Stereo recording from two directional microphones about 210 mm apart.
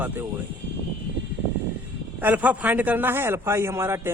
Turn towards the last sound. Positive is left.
turn(degrees=-10)  # may be behind; listen again after turning